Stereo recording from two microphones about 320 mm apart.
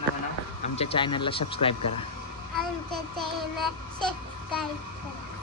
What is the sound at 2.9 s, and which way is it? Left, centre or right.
Child singing, centre.